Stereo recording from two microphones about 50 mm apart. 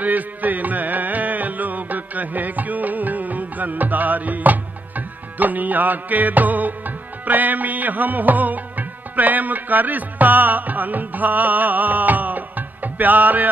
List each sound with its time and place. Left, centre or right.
0.0 s music: right